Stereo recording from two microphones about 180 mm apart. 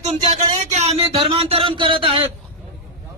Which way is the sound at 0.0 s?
40° right (ahead or behind).